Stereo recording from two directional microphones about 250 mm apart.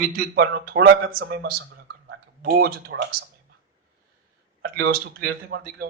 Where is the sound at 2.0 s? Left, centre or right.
Right.